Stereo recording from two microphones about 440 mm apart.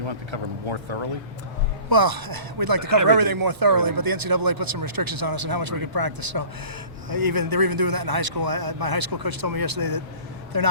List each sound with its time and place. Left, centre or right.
0.0 s speech: right
1.9 s speech: right